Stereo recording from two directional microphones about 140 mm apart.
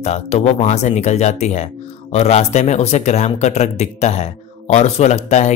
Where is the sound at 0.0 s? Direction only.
50° left (ahead or behind).